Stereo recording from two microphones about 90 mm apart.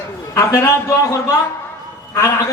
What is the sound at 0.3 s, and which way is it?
Speech, 35° left (ahead or behind).